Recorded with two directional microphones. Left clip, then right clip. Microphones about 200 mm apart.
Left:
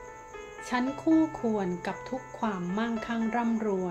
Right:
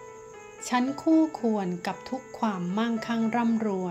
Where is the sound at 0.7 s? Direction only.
35° right (ahead or behind).